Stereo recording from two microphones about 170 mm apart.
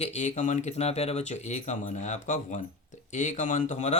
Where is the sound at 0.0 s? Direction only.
40° left (ahead or behind).